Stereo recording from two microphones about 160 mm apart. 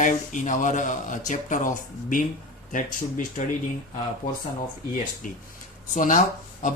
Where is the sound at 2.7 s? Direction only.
55° left (ahead or behind).